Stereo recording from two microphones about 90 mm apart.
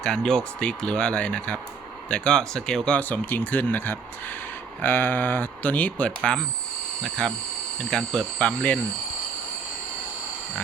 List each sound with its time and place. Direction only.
0.0 s speech: 5° left (ahead or behind)
3.0 s speech: 20° left (ahead or behind)